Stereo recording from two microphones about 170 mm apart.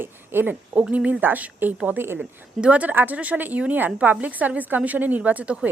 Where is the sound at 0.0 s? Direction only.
15° right (ahead or behind).